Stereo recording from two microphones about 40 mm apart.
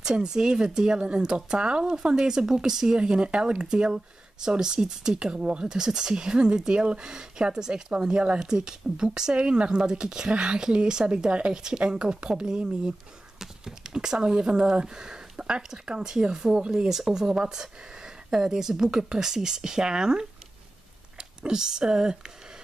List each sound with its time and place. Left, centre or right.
0.0 s speech: centre